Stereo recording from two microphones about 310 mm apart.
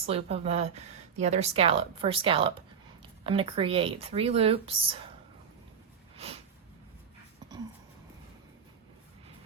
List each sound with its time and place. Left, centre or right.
0.0 s speech: centre